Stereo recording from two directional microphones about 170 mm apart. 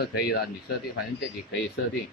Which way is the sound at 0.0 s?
65° left (ahead or behind).